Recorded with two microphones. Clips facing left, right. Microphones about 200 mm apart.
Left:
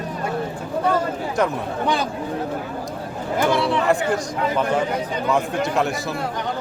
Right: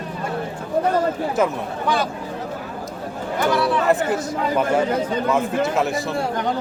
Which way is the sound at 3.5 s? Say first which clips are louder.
Right 2 dB; 25° left (ahead or behind).